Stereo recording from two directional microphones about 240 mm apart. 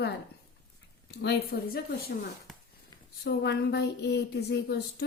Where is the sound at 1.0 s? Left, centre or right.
Left.